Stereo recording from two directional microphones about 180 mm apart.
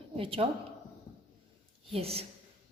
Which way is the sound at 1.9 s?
35° right (ahead or behind).